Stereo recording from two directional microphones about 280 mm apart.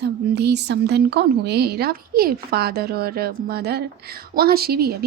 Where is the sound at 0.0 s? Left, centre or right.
Right.